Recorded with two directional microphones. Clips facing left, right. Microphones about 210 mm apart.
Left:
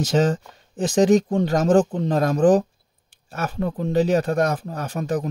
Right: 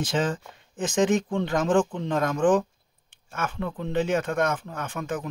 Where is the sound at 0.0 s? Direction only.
40° left (ahead or behind).